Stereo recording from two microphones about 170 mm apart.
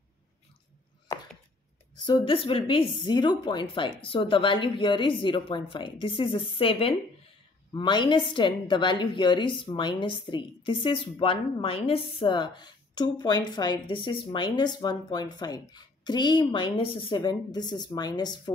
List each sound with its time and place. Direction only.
2.0 s a woman's voice: 30° left (ahead or behind)